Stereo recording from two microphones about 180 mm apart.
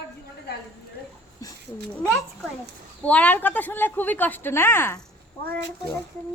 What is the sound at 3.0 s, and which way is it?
A woman's voice, 10° left (ahead or behind).